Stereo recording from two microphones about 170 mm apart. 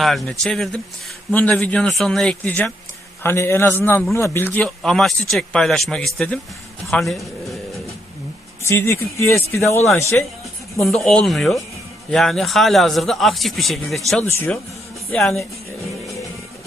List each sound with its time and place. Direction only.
0.0 s a man's voice: centre (ahead or behind)
8.6 s speech: 15° left (ahead or behind)
10.8 s speech: centre (ahead or behind)
14.3 s speech: 15° left (ahead or behind)